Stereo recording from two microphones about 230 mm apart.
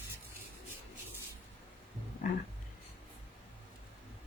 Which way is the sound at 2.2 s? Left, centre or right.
Left.